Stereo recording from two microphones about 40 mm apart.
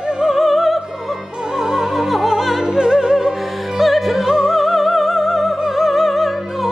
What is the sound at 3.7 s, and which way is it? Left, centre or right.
Opera, centre.